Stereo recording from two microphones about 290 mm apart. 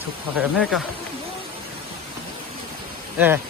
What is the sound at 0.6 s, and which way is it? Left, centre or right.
Speech, centre.